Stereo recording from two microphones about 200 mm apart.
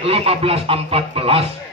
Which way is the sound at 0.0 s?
30° right (ahead or behind).